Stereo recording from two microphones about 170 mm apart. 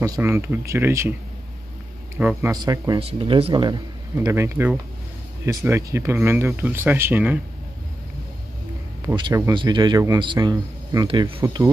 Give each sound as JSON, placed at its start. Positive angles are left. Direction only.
{"t": 0.0, "sound": "speech", "side_deg": -15}
{"t": 2.1, "sound": "speech", "side_deg": -10}
{"t": 2.5, "sound": "speech", "side_deg": -25}
{"t": 9.0, "sound": "speech", "side_deg": -25}
{"t": 11.4, "sound": "speech", "side_deg": -20}